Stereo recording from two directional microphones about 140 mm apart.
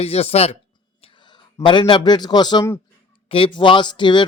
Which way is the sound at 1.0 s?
35° left (ahead or behind).